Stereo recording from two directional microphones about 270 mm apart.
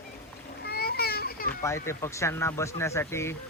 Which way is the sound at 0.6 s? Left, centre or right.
Left.